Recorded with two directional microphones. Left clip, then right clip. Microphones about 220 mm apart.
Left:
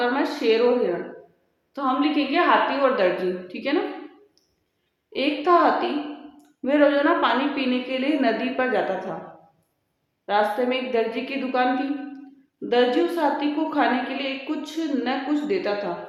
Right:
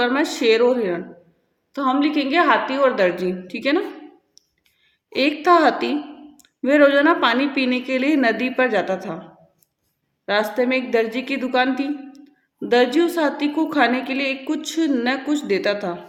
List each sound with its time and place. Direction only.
0.0 s speech: 45° right (ahead or behind)
1.7 s a woman's voice: 45° right (ahead or behind)
5.1 s a woman's voice: 45° right (ahead or behind)
10.2 s a woman's voice: 40° right (ahead or behind)